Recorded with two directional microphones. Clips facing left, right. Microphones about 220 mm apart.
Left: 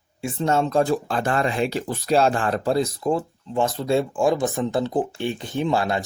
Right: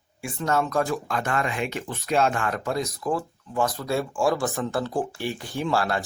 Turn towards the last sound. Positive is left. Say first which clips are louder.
# left 3 dB
turn(degrees=20)  # may be behind; listen again after turning